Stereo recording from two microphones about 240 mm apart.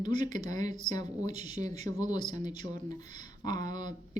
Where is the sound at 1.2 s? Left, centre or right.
Right.